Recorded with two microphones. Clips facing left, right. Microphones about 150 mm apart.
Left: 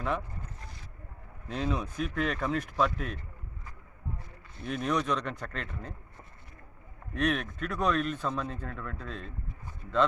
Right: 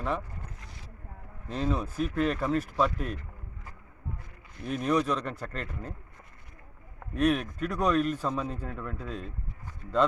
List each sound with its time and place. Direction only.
1.5 s speech: centre (ahead or behind)
4.6 s speech: 5° right (ahead or behind)
7.1 s speech: 5° right (ahead or behind)